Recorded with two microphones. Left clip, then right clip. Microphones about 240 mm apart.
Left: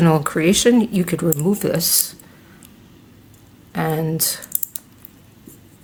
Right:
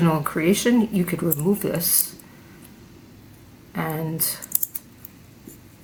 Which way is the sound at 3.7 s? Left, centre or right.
Left.